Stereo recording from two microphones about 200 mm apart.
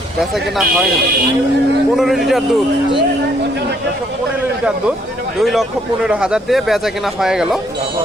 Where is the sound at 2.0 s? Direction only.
Centre (ahead or behind).